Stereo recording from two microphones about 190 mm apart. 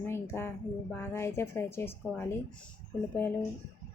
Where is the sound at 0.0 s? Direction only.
15° left (ahead or behind).